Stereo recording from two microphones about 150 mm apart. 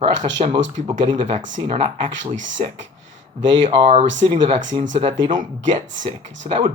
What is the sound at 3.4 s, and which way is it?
Speech, 35° right (ahead or behind).